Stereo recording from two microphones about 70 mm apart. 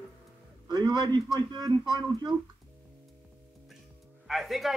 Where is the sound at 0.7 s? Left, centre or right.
Right.